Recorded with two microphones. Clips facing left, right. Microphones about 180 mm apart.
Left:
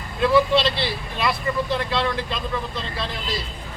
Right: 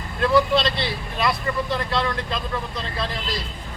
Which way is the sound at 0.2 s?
Centre (ahead or behind).